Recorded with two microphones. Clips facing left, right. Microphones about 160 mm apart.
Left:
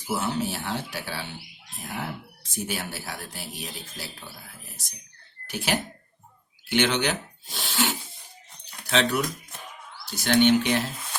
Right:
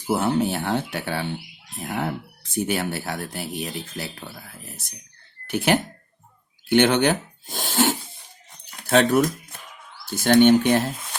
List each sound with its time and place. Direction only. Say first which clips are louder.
0.1 s speech: right 6 dB; 60° right (ahead or behind)
5.5 s speech: right 7 dB; 55° right (ahead or behind)